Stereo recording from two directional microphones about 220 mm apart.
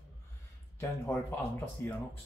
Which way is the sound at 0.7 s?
10° left (ahead or behind).